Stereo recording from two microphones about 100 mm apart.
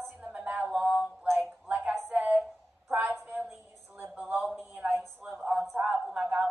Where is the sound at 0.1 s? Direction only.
15° right (ahead or behind).